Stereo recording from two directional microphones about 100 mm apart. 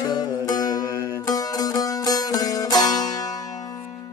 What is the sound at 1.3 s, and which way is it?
Music, 35° left (ahead or behind).